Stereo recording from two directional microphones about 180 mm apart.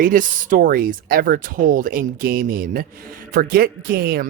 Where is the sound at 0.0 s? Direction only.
50° right (ahead or behind).